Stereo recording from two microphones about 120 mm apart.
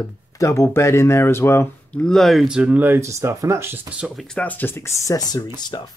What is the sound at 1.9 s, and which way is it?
Speech, 5° left (ahead or behind).